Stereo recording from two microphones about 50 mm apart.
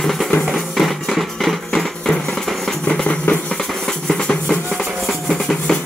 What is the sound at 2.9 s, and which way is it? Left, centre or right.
Music, left.